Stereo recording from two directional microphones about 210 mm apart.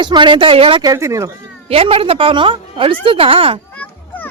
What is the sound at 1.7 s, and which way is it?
Speech, 30° right (ahead or behind).